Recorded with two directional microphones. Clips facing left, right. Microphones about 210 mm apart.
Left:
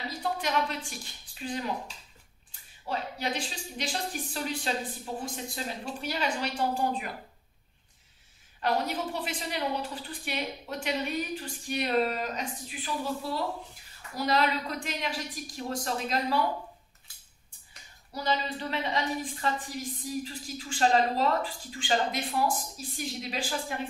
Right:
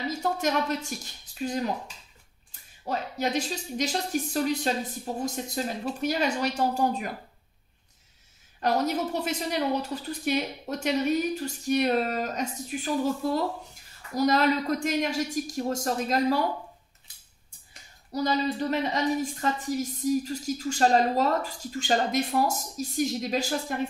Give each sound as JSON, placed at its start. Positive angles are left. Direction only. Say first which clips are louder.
{"t": 0.1, "sound": "a woman's voice", "louder": "right 2 dB", "side_deg": -45}
{"t": 2.8, "sound": "a woman's voice", "louder": "right 4 dB", "side_deg": -40}
{"t": 8.5, "sound": "a woman's voice", "louder": "right 4 dB", "side_deg": -40}
{"t": 18.1, "sound": "a woman's voice", "louder": "right 5 dB", "side_deg": -40}